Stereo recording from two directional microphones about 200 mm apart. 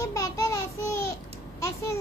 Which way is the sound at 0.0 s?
15° left (ahead or behind).